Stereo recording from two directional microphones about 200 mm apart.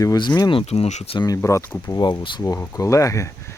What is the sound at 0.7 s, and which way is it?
Speech, 35° left (ahead or behind).